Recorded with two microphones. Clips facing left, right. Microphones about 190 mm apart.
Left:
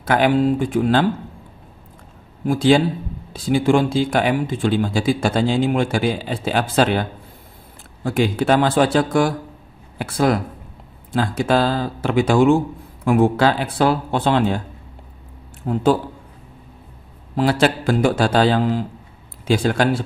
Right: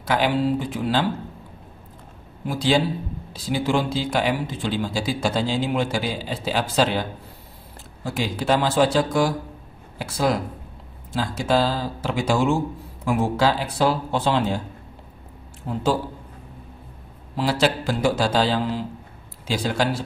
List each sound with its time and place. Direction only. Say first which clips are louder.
0.0 s speech: left 5 dB; 50° left (ahead or behind)
2.4 s speech: left 6 dB; 50° left (ahead or behind)
15.7 s speech: left 6 dB; 50° left (ahead or behind)
17.4 s speech: left 4 dB; 55° left (ahead or behind)